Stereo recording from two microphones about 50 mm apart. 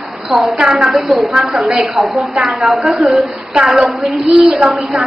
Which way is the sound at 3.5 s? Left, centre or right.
Centre.